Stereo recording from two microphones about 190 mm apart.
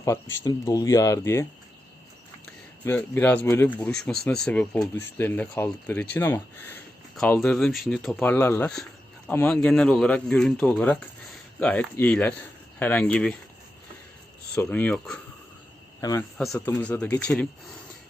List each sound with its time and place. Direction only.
0.0 s speech: 15° left (ahead or behind)
2.8 s speech: 10° left (ahead or behind)
14.5 s speech: 10° left (ahead or behind)
16.0 s a man's voice: 20° left (ahead or behind)
16.4 s speech: 5° left (ahead or behind)